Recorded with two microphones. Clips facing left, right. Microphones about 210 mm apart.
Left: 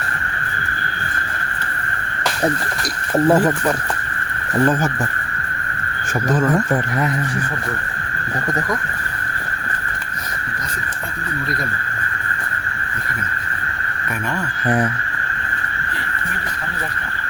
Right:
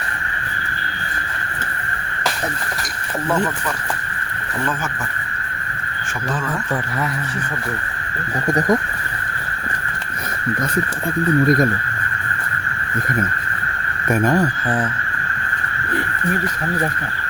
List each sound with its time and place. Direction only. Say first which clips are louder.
3.2 s speech: left 5 dB; 35° left (ahead or behind)
8.4 s speech: right 7 dB; 20° right (ahead or behind)
11.3 s speech: right 11 dB; 50° right (ahead or behind)
14.1 s speech: right 9 dB; 40° right (ahead or behind)